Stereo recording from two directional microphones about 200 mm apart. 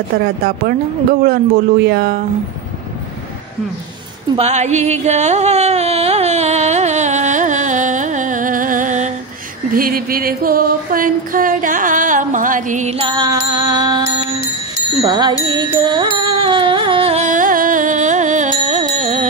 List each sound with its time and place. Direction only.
1.2 s a man's voice: 50° right (ahead or behind)
4.4 s a sound: 35° right (ahead or behind)
9.8 s music: 45° right (ahead or behind)